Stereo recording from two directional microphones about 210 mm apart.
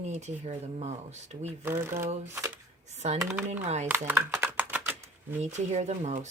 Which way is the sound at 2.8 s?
30° right (ahead or behind).